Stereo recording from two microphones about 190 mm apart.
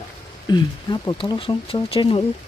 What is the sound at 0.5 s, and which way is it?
Speech, 25° left (ahead or behind).